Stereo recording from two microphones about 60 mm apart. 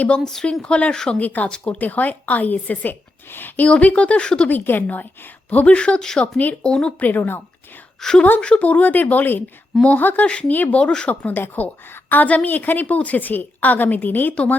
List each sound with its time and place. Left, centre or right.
0.6 s speech: centre
1.2 s a woman's voice: left
1.5 s speech: centre
1.8 s a woman's voice: left
3.7 s a woman's voice: left
4.4 s a woman's voice: left; by 6.9 s centre
7.0 s speech: left
8.0 s speech: centre
8.4 s a woman's voice: left